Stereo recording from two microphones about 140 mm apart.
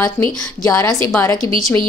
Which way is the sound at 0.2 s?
15° left (ahead or behind).